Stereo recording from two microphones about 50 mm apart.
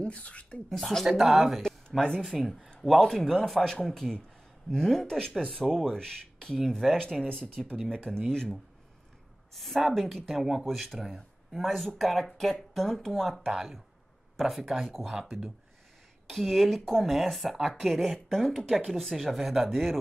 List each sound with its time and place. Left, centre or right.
0.0 s speech: left
0.7 s speech: centre
1.9 s speech: centre
2.2 s speech: centre
9.5 s speech: centre
13.5 s speech: centre
16.3 s speech: centre